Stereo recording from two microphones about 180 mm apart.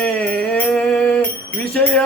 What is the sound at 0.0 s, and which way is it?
Music, 5° left (ahead or behind).